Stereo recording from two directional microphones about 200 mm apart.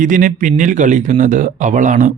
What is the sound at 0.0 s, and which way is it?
Speech, 40° right (ahead or behind).